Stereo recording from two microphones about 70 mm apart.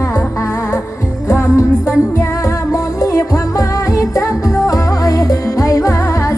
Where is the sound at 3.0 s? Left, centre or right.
Left.